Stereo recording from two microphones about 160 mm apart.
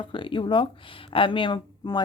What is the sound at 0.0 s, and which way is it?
A woman's voice, 30° left (ahead or behind).